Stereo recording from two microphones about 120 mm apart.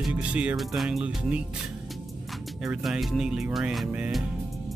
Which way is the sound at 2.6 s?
5° right (ahead or behind).